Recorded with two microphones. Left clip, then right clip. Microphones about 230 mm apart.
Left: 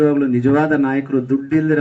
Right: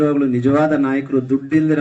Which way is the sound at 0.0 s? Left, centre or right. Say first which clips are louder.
Left 1 dB; left.